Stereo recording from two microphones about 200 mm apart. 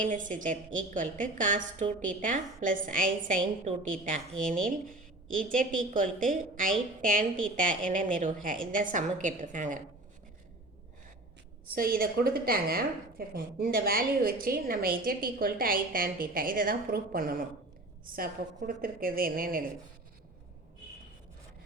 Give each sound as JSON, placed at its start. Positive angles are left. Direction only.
{"t": 0.0, "sound": "a woman's voice", "side_deg": -40}
{"t": 5.4, "sound": "a woman's voice", "side_deg": -40}
{"t": 11.7, "sound": "a woman's voice", "side_deg": -45}